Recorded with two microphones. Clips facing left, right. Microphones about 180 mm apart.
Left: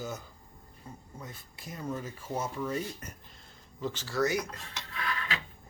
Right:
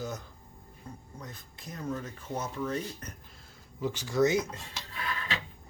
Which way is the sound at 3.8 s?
10° right (ahead or behind).